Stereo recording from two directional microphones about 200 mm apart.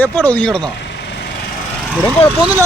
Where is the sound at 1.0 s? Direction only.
60° left (ahead or behind).